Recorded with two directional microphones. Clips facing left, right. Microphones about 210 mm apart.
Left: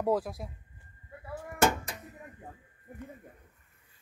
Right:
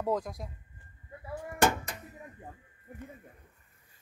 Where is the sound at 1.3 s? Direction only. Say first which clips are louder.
Even; centre (ahead or behind).